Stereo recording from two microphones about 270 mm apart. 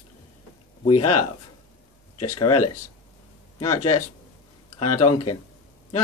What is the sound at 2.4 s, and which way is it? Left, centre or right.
Speech, left.